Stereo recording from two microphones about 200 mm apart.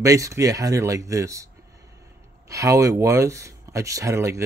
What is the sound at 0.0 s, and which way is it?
Speech, 15° right (ahead or behind).